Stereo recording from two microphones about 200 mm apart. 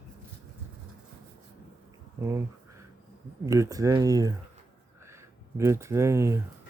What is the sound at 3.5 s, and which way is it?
Speech, 15° right (ahead or behind).